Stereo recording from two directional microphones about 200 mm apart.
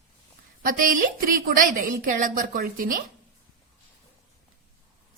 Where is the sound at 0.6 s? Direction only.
45° right (ahead or behind).